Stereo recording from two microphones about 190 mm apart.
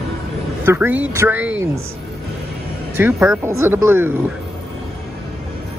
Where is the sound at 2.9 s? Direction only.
10° right (ahead or behind).